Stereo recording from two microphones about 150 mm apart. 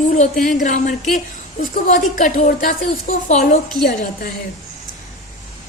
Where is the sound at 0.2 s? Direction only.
60° left (ahead or behind).